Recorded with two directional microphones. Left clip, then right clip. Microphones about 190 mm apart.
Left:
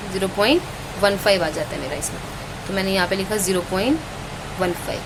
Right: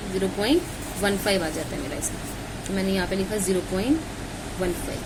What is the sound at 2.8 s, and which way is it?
A woman's voice, 20° left (ahead or behind).